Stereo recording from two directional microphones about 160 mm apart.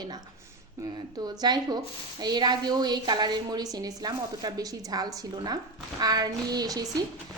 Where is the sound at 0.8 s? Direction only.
25° right (ahead or behind).